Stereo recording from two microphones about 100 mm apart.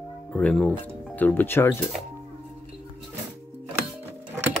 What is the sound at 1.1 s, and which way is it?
Speech, 15° left (ahead or behind).